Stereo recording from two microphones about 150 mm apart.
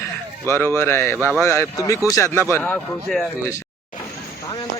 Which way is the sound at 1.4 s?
15° left (ahead or behind).